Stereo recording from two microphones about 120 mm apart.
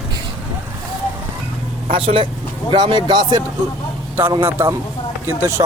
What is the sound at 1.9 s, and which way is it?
Speech, 50° right (ahead or behind).